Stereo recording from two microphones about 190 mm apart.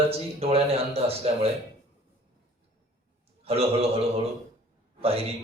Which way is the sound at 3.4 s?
30° right (ahead or behind).